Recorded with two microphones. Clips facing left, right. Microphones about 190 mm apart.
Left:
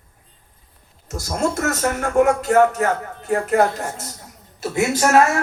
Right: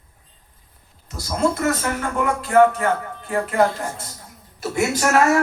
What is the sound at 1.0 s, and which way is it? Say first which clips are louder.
Speech: right 1 dB; 45° left (ahead or behind).